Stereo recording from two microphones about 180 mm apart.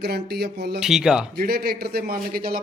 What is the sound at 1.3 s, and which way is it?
A man's voice, 60° right (ahead or behind).